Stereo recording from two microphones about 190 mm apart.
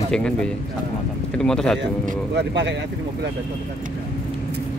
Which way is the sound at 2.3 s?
65° right (ahead or behind).